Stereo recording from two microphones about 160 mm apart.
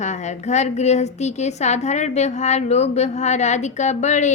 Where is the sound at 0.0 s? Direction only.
45° left (ahead or behind).